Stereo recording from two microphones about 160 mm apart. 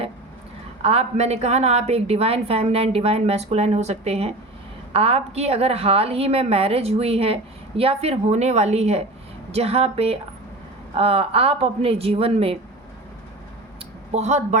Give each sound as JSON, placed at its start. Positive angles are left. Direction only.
{"t": 0.8, "sound": "a woman's voice", "side_deg": -40}
{"t": 14.1, "sound": "a woman's voice", "side_deg": -45}